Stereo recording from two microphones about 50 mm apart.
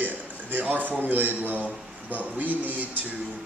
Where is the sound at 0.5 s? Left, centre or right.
Right.